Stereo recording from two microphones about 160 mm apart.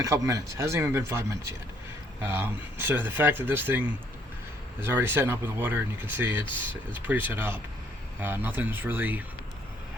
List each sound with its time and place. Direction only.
0.0 s speech: 20° right (ahead or behind)